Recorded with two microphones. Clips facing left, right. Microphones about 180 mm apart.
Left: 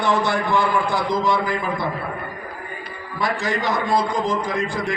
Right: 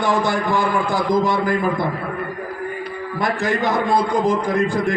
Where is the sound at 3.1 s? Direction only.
55° right (ahead or behind).